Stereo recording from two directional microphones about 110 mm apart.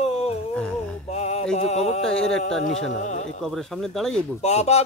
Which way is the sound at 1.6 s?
80° left.